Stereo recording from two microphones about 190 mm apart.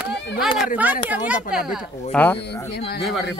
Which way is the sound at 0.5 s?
5° right (ahead or behind).